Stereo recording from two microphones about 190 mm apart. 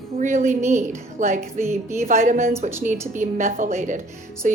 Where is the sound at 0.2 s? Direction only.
40° right (ahead or behind).